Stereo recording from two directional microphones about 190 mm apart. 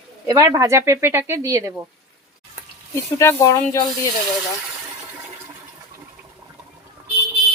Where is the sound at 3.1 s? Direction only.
15° left (ahead or behind).